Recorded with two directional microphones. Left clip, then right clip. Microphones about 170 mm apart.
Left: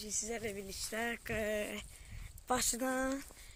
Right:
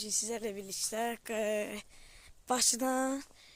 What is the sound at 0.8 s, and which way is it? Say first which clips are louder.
Speech: right 4 dB; 35° right (ahead or behind).